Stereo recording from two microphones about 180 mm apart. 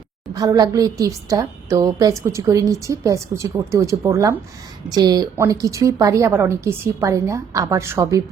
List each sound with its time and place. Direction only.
0.3 s a woman's voice: 20° right (ahead or behind)